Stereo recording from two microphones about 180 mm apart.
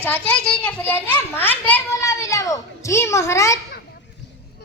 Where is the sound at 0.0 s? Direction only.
10° left (ahead or behind).